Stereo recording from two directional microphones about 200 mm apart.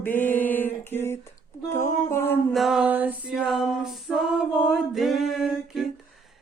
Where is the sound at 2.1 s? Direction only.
10° left (ahead or behind).